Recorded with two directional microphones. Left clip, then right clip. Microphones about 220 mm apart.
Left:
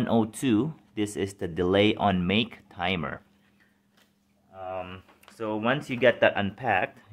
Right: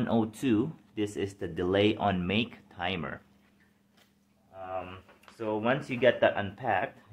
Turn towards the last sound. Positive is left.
turn(degrees=45)  # may be behind; listen again after turning